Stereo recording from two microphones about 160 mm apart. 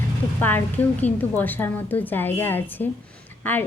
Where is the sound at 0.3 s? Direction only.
10° left (ahead or behind).